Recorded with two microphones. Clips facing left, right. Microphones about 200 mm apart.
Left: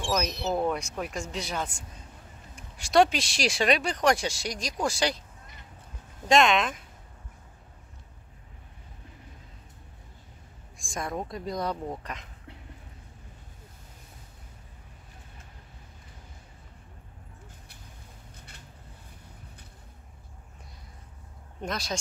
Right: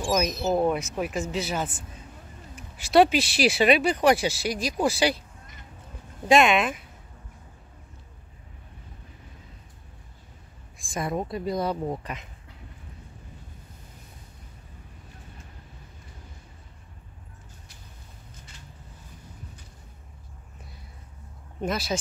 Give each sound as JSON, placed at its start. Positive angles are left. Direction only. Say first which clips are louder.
{"t": 0.0, "sound": "speech", "louder": "right 4 dB", "side_deg": -5}
{"t": 6.2, "sound": "speech", "louder": "right 3 dB", "side_deg": -5}
{"t": 10.8, "sound": "speech", "louder": "right 4 dB", "side_deg": 0}
{"t": 18.3, "sound": "a sound", "louder": "right 2 dB", "side_deg": 60}
{"t": 21.5, "sound": "speech", "louder": "right 5 dB", "side_deg": -5}